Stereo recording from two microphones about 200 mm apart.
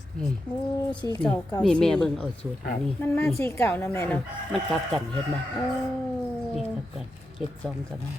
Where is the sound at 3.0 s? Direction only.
10° left (ahead or behind).